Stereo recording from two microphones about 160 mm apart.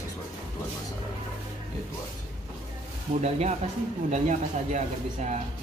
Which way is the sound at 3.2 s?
45° right (ahead or behind).